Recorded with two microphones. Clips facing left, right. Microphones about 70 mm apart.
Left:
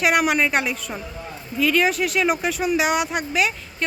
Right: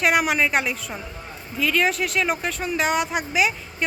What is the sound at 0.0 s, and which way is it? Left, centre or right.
Speech, centre.